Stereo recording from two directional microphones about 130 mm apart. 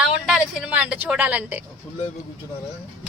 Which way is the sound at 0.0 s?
5° right (ahead or behind).